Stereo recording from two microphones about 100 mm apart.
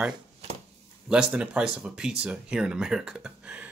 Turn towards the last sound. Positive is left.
turn(degrees=-10)  # may be behind; listen again after turning